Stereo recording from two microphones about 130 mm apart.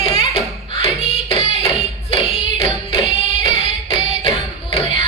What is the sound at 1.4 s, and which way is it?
Music, 40° left (ahead or behind).